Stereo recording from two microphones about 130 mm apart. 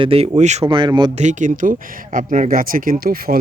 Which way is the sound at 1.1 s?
65° right (ahead or behind).